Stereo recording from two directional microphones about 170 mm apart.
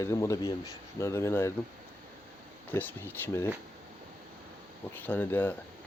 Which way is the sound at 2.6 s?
10° left (ahead or behind).